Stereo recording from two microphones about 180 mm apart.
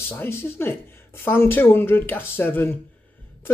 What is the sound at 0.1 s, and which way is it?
Speech, 10° left (ahead or behind).